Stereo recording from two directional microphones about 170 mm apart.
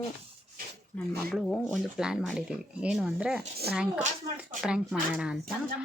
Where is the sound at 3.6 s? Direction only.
70° right (ahead or behind).